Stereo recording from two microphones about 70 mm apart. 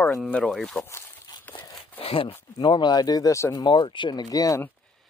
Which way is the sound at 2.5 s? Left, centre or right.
Left.